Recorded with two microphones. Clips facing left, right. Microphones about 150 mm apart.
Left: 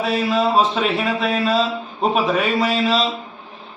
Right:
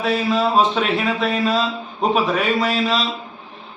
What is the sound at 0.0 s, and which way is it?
Speech, centre (ahead or behind).